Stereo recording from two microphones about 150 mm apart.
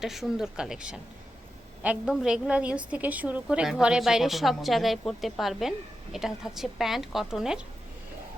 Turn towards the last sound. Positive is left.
turn(degrees=-5)  # may be behind; listen again after turning